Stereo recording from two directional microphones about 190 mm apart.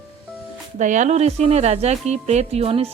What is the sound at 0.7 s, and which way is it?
Speech, 40° right (ahead or behind).